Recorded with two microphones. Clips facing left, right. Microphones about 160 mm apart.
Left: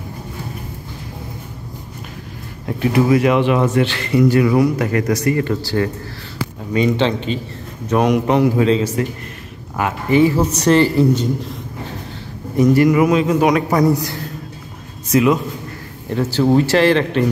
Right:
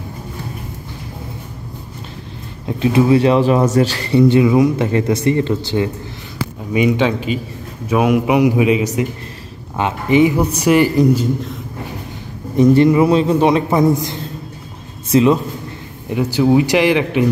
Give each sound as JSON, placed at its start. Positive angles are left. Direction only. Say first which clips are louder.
{"t": 2.6, "sound": "speech", "louder": "right 2 dB", "side_deg": -20}
{"t": 12.5, "sound": "a man's voice", "louder": "right 2 dB", "side_deg": -25}
{"t": 16.1, "sound": "speech", "louder": "right 1 dB", "side_deg": -15}